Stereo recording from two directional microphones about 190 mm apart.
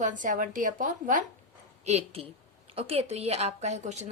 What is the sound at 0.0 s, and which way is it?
A woman's voice, 45° right (ahead or behind).